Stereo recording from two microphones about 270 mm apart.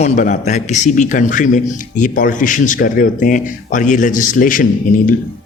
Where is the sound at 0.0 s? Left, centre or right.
Left.